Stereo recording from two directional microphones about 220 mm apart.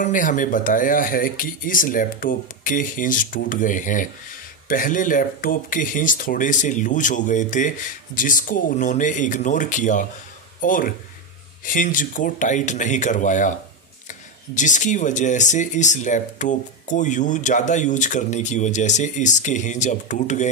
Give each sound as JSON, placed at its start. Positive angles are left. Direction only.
{"t": 0.0, "sound": "speech", "side_deg": 35}